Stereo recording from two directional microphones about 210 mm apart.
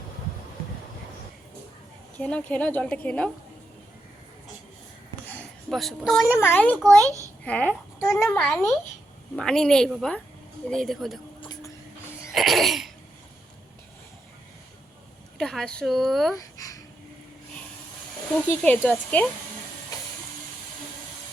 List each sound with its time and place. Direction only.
2.1 s a woman's voice: 5° left (ahead or behind)
5.7 s a woman's voice: centre (ahead or behind)
6.3 s a child's voice: 10° left (ahead or behind)
7.0 s a child's voice: 15° right (ahead or behind)
7.4 s a woman's voice: 5° left (ahead or behind)
11.3 s a sound: 20° left (ahead or behind)
12.3 s cough: centre (ahead or behind)
15.4 s a woman's voice: 5° left (ahead or behind)
16.3 s a sound: 15° left (ahead or behind)
18.6 s a woman's voice: 5° left (ahead or behind)